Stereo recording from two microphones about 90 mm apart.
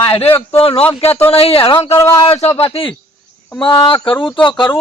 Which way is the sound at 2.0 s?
30° left (ahead or behind).